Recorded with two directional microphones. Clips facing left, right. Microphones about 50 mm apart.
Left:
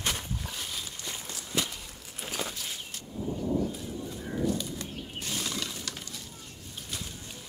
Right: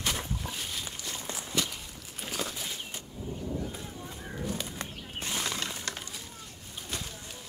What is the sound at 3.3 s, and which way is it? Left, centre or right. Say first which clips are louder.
Thunder: left 6 dB; left.